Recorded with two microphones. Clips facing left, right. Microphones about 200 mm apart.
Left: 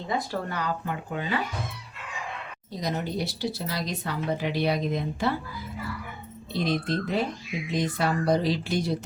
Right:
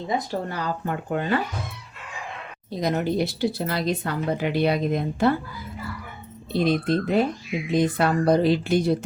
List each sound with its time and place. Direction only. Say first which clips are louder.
0.1 s speech: right 2 dB; 25° right (ahead or behind)
0.9 s speech: right 6 dB; 50° right (ahead or behind)
2.8 s a woman's voice: right 6 dB; 60° right (ahead or behind)
6.5 s a woman's voice: right 5 dB; 55° right (ahead or behind)